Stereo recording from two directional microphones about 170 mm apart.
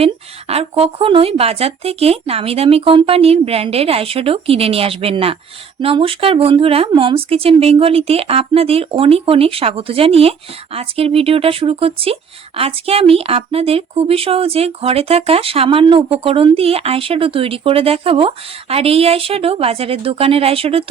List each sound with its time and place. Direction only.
0.0 s speech: 35° right (ahead or behind)